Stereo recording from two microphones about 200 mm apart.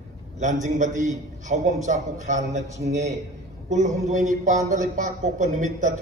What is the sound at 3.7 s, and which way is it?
A man's voice, 35° right (ahead or behind).